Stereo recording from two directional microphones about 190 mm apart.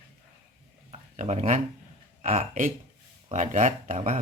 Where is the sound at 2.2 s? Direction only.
35° right (ahead or behind).